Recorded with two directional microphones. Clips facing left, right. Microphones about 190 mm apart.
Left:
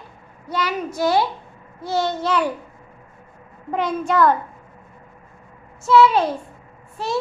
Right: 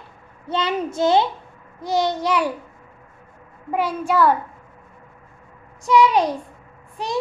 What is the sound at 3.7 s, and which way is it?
Speech, 10° right (ahead or behind).